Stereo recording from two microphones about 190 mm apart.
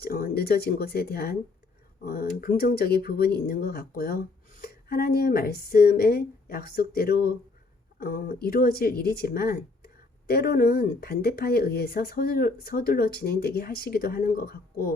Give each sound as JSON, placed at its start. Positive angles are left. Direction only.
{"t": 0.0, "sound": "speech", "side_deg": 50}